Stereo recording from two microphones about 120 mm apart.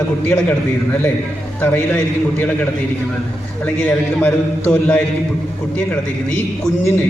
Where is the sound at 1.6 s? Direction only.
15° left (ahead or behind).